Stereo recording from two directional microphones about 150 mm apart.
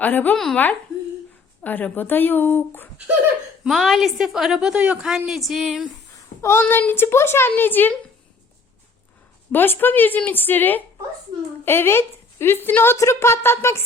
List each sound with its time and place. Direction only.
0.0 s a woman's voice: 10° left (ahead or behind)
3.6 s a woman's voice: centre (ahead or behind)
6.4 s a woman's voice: 15° left (ahead or behind)
9.5 s a woman's voice: 15° left (ahead or behind)